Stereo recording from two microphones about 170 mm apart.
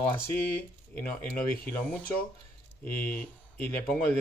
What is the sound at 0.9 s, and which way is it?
Speech, 10° left (ahead or behind).